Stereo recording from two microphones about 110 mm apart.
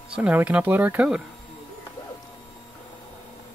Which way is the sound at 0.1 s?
15° right (ahead or behind).